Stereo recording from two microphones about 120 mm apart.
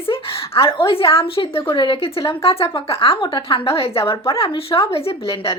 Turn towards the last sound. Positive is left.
turn(degrees=50)  # may be behind; listen again after turning